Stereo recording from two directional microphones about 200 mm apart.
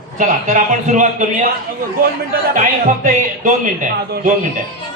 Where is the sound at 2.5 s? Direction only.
40° right (ahead or behind).